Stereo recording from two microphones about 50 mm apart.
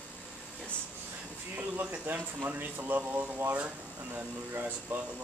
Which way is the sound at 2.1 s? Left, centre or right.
Right.